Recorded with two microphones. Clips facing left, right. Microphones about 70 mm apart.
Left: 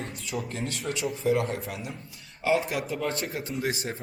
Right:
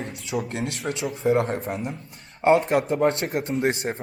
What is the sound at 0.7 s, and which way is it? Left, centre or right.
Speech, right.